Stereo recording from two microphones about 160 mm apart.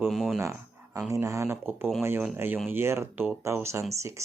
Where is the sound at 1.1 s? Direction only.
20° right (ahead or behind).